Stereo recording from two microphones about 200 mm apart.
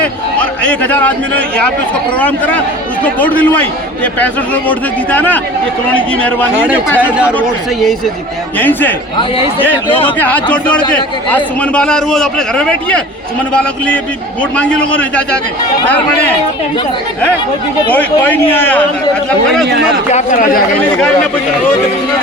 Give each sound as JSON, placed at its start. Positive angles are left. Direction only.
{"t": 0.0, "sound": "a man's voice", "side_deg": 5}
{"t": 7.0, "sound": "a man's voice", "side_deg": -5}
{"t": 10.2, "sound": "a man's voice", "side_deg": 5}
{"t": 17.9, "sound": "speech", "side_deg": 10}
{"t": 20.1, "sound": "a man's voice", "side_deg": 40}